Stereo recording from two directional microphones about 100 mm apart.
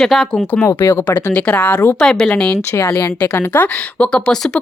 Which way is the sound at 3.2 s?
20° left (ahead or behind).